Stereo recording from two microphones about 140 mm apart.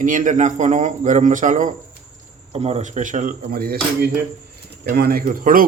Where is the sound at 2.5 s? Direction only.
45° right (ahead or behind).